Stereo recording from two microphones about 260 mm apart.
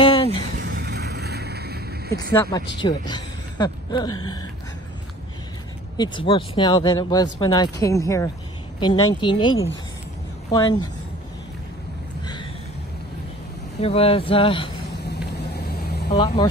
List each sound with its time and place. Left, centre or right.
0.0 s a sound: left
0.6 s vehicle: right
2.8 s speech: centre
5.9 s speech: centre
10.5 s speech: centre
13.7 s speech: left
15.0 s vehicle: left
16.2 s speech: centre